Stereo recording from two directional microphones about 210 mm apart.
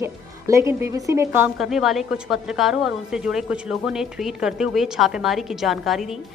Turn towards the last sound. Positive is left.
turn(degrees=0)  # may be behind; listen again after turning